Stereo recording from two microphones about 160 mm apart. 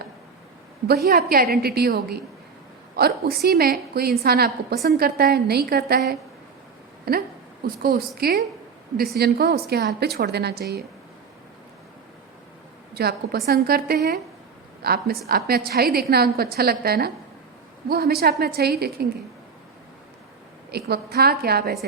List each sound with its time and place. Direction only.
0.9 s a woman's voice: 75° right (ahead or behind)
9.1 s a woman's voice: 90° right
12.9 s a woman's voice: 80° right
20.7 s a woman's voice: 85° right